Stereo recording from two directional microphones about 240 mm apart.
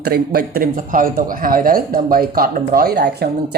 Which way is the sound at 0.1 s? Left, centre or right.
Right.